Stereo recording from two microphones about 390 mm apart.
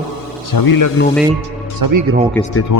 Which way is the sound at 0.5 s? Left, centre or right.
Left.